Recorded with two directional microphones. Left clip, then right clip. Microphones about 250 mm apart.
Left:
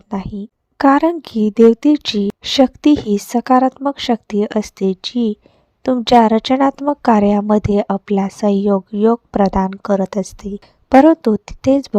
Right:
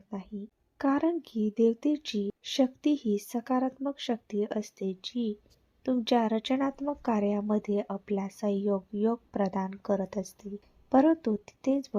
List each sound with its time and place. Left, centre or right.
0.1 s speech: left